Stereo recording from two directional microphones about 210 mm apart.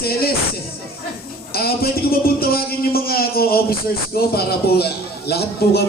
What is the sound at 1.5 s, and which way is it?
Speech, 45° left (ahead or behind).